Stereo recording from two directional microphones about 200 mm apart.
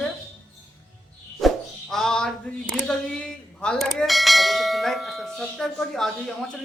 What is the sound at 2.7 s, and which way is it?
Bell, 5° left (ahead or behind).